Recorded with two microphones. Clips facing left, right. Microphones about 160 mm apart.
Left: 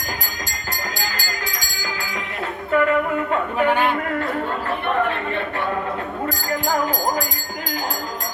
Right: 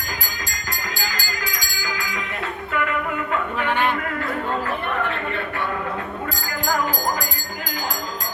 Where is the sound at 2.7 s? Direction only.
35° left (ahead or behind).